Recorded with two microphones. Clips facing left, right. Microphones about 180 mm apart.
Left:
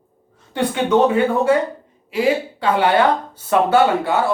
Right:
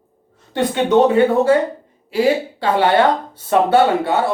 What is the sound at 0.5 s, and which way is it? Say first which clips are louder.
A woman's voice: right 2 dB; 25° right (ahead or behind).